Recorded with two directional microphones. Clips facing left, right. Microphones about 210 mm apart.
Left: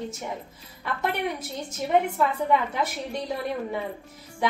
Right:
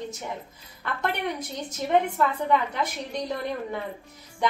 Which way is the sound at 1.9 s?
10° left (ahead or behind).